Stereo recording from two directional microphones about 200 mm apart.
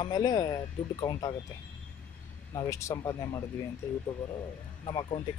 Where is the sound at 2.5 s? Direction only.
15° left (ahead or behind).